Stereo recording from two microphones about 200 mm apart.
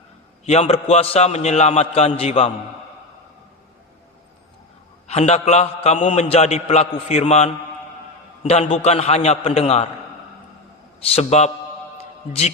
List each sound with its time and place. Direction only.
0.4 s a man's voice: 30° left (ahead or behind)
5.0 s a man's voice: 30° left (ahead or behind)
11.1 s a man's voice: 35° left (ahead or behind)